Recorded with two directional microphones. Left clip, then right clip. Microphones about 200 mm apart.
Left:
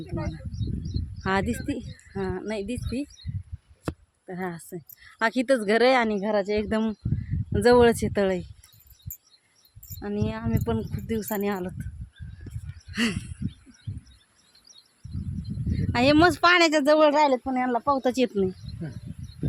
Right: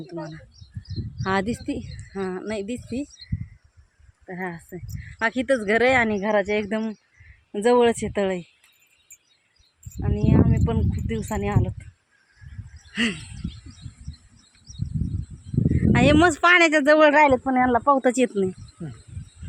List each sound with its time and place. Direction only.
0.2 s speech: 5° right (ahead or behind)
4.3 s speech: 10° left (ahead or behind)
6.1 s speech: centre (ahead or behind)
6.6 s speech: 15° left (ahead or behind)
10.0 s speech: 10° left (ahead or behind)
12.9 s a sound: centre (ahead or behind)
15.9 s speech: centre (ahead or behind)